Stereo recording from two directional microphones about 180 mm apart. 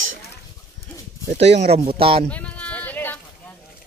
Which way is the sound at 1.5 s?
35° right (ahead or behind).